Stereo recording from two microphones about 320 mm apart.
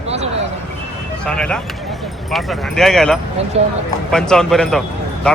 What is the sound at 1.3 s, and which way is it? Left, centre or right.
A man's voice, centre.